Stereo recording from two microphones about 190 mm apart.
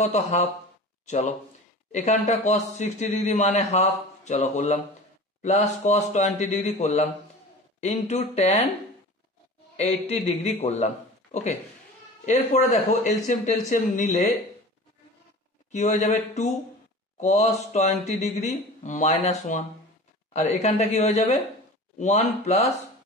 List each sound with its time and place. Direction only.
0.0 s a man's voice: 35° left (ahead or behind)
9.8 s a man's voice: 35° left (ahead or behind)
15.7 s a man's voice: 40° left (ahead or behind)